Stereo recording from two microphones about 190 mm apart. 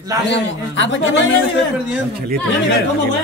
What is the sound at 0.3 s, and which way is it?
A man's voice, 75° left (ahead or behind).